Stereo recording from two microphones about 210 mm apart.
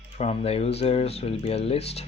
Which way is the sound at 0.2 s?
30° left (ahead or behind).